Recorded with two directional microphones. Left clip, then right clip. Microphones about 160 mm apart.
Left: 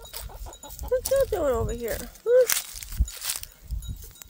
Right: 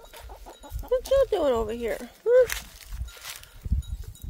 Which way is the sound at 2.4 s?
90° left.